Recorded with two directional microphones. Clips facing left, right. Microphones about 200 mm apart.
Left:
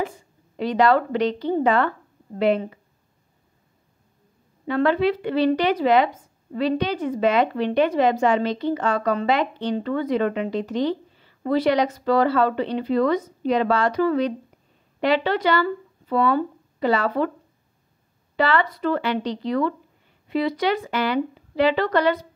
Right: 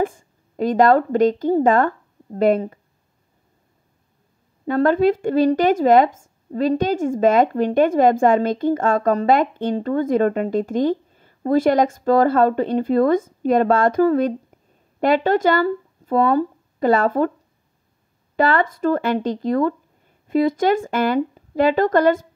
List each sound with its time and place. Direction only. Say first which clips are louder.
0.0 s a woman's voice: right 6 dB; 50° right (ahead or behind)
4.6 s speech: right 4 dB; 45° right (ahead or behind)
18.3 s speech: right 3 dB; 50° right (ahead or behind)